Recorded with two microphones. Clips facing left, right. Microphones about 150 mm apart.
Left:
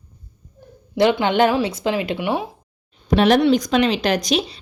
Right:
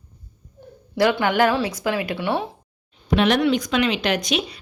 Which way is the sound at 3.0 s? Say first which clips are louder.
Left 4 dB; 40° left (ahead or behind).